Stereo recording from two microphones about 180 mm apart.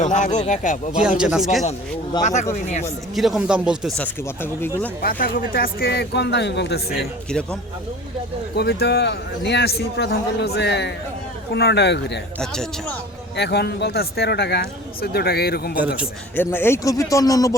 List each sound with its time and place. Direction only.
0.0 s speech: 45° left (ahead or behind)
1.2 s speech: 5° right (ahead or behind)
2.2 s speech: 40° left (ahead or behind)
3.2 s a man's voice: centre (ahead or behind)
5.0 s a man's voice: 55° left (ahead or behind); by 6.8 s 70° left (ahead or behind)
7.0 s speech: 5° left (ahead or behind)
8.5 s a man's voice: 65° left (ahead or behind)
13.3 s a man's voice: 65° left (ahead or behind)
16.3 s a man's voice: 10° left (ahead or behind)